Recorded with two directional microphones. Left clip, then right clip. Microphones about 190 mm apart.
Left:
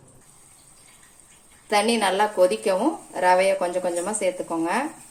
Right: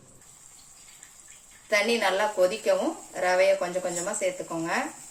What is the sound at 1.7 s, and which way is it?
Speech, 45° left (ahead or behind).